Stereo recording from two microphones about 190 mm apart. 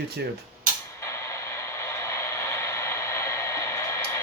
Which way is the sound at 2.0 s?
15° left (ahead or behind).